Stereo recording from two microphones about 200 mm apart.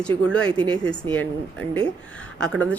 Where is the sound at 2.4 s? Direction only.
5° left (ahead or behind).